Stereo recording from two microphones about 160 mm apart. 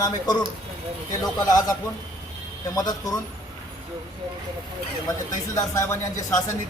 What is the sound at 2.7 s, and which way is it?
Speech, 25° left (ahead or behind).